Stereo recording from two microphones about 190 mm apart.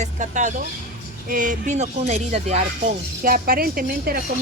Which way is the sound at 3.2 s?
50° right (ahead or behind).